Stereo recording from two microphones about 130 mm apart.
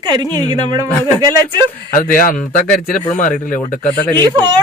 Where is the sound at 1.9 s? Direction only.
90° left.